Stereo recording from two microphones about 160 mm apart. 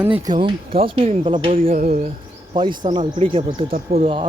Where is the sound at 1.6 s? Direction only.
60° right (ahead or behind).